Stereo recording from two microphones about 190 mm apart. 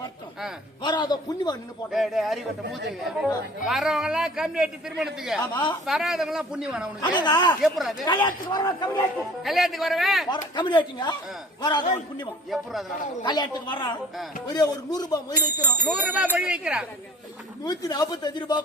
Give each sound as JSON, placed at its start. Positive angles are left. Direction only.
{"t": 0.8, "sound": "speech", "side_deg": 25}
{"t": 1.9, "sound": "a man's voice", "side_deg": 0}
{"t": 3.7, "sound": "a man's voice", "side_deg": 0}
{"t": 5.4, "sound": "speech", "side_deg": 25}
{"t": 5.8, "sound": "a man's voice", "side_deg": 0}
{"t": 7.0, "sound": "speech", "side_deg": 25}
{"t": 7.6, "sound": "a man's voice", "side_deg": 0}
{"t": 8.0, "sound": "speech", "side_deg": 20}
{"t": 9.4, "sound": "a man's voice", "side_deg": 0}
{"t": 10.2, "sound": "speech", "side_deg": 25}
{"t": 15.8, "sound": "speech", "side_deg": -5}
{"t": 17.6, "sound": "speech", "side_deg": 20}